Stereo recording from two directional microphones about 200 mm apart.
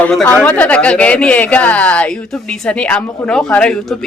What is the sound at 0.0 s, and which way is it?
Speech, 5° left (ahead or behind).